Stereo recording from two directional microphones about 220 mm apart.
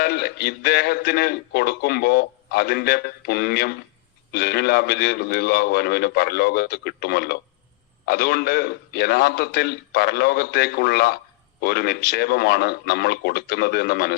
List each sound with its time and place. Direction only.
0.0 s a man's voice: 45° left (ahead or behind)